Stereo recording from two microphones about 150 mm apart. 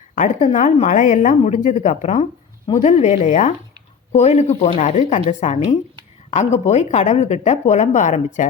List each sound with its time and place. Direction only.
0.2 s a woman's voice: 55° left (ahead or behind)